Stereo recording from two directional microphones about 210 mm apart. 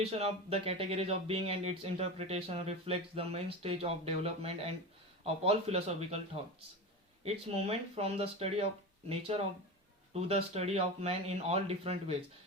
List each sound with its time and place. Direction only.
0.0 s speech: 30° right (ahead or behind)
7.3 s speech: 30° right (ahead or behind)